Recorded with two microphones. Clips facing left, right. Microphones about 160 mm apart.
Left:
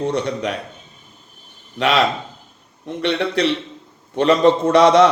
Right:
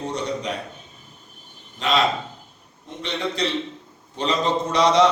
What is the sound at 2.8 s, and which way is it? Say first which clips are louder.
A man's voice: left 7 dB; 70° left (ahead or behind).